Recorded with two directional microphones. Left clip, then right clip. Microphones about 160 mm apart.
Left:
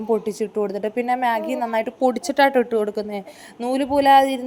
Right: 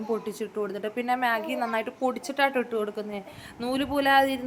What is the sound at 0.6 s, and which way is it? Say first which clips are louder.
A woman's voice: left 6 dB; 30° left (ahead or behind).